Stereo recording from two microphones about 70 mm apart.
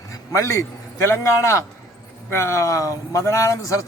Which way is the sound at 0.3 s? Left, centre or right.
Left.